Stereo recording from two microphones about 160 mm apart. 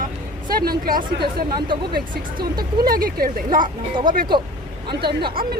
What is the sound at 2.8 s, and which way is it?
Speech, 65° right (ahead or behind).